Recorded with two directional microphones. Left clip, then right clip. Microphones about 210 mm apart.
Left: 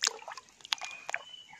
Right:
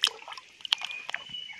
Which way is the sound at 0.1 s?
10° left (ahead or behind).